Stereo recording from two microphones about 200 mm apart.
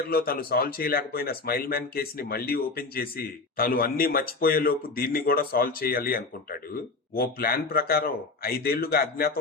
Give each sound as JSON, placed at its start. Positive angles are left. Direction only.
{"t": 0.1, "sound": "speech", "side_deg": 50}